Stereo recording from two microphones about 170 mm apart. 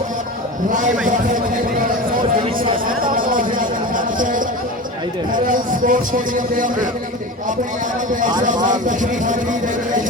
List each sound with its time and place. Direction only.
2.8 s a sound: 55° right (ahead or behind)
5.3 s a man's voice: 55° right (ahead or behind)
8.6 s a man's voice: 50° right (ahead or behind)